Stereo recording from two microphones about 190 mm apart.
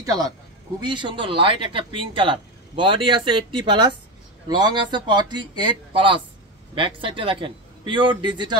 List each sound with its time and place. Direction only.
0.0 s a man's voice: 20° right (ahead or behind)